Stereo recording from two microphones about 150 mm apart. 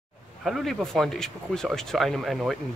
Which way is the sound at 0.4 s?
Centre (ahead or behind).